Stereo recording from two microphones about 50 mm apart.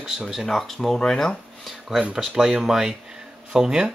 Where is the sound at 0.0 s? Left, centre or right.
Centre.